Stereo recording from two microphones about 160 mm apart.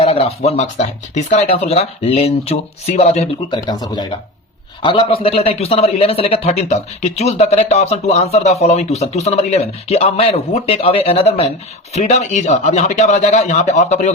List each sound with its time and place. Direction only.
0.0 s a man's voice: 40° left (ahead or behind)
3.5 s a man's voice: 25° left (ahead or behind); by 14.1 s 50° left (ahead or behind)